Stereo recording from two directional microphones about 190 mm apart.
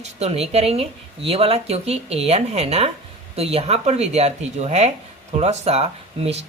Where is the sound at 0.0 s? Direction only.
35° right (ahead or behind).